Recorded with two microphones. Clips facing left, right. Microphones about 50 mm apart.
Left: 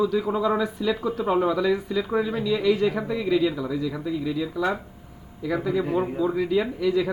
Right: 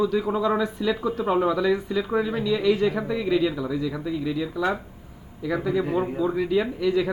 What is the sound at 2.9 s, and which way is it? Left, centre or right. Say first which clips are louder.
Speech: even; centre.